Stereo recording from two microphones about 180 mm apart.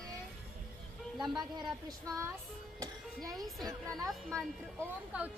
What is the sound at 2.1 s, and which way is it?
Music, 15° right (ahead or behind).